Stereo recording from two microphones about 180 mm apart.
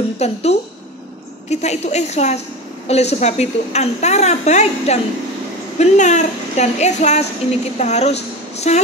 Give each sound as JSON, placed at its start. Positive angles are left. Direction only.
{"t": 0.2, "sound": "a woman's voice", "side_deg": 35}